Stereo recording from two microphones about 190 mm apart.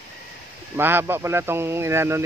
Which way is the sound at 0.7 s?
10° right (ahead or behind).